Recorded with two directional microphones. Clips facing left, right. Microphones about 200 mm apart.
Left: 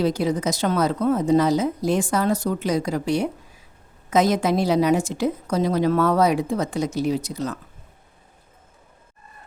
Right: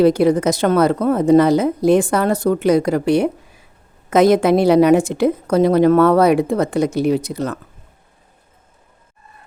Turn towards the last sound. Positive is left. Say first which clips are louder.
# right 6 dB
turn(degrees=-60)  # may be behind; listen again after turning